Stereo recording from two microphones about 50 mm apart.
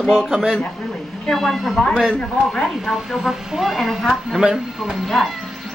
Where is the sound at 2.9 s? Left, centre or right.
Centre.